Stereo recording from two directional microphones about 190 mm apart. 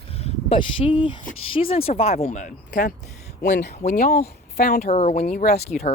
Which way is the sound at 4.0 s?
50° left (ahead or behind).